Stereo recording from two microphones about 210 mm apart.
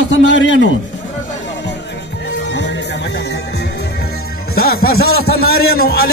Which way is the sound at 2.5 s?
55° left (ahead or behind).